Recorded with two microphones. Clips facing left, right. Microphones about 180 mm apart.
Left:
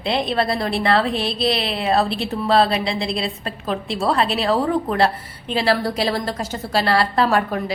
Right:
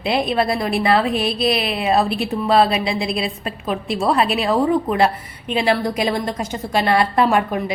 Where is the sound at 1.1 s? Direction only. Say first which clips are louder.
Right 2 dB; 25° left (ahead or behind).